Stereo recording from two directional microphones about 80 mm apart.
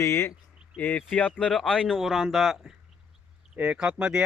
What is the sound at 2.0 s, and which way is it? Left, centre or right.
Speech, centre.